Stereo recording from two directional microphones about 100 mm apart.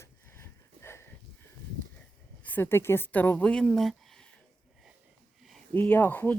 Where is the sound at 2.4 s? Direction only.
15° left (ahead or behind).